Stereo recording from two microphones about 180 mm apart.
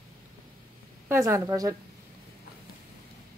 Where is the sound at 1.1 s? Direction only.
15° right (ahead or behind).